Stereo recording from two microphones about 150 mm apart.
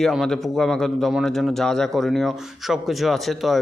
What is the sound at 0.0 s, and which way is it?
A man's voice, centre (ahead or behind).